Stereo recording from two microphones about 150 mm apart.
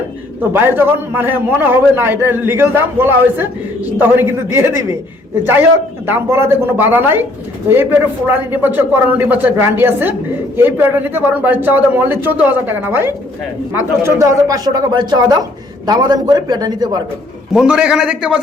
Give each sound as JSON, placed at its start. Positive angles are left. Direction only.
{"t": 0.5, "sound": "a man's voice", "side_deg": -15}
{"t": 6.1, "sound": "a man's voice", "side_deg": -15}
{"t": 17.5, "sound": "a man's voice", "side_deg": -5}